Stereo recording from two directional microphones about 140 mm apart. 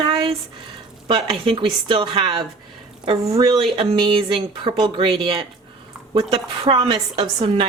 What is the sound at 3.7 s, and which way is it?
A woman's voice, 35° right (ahead or behind).